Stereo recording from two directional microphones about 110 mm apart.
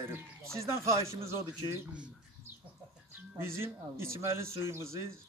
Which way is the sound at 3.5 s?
25° right (ahead or behind).